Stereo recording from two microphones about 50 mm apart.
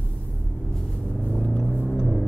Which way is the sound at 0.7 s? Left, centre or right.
Centre.